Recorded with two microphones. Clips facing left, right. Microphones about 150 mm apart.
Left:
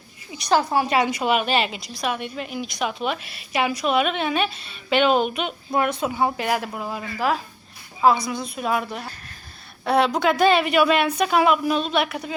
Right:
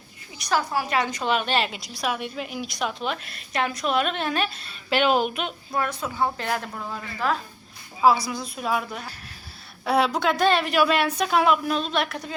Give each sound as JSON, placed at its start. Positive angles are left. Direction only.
{"t": 0.4, "sound": "a woman's voice", "side_deg": 25}
{"t": 0.9, "sound": "a woman's voice", "side_deg": 10}
{"t": 6.0, "sound": "a woman's voice", "side_deg": 20}
{"t": 8.3, "sound": "a woman's voice", "side_deg": 0}